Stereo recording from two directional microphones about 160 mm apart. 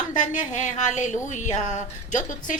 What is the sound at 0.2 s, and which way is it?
Speech, 50° left (ahead or behind).